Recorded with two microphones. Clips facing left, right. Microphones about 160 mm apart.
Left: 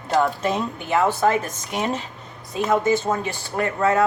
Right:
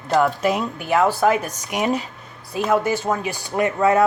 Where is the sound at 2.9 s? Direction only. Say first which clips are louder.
Left 1 dB; 5° right (ahead or behind).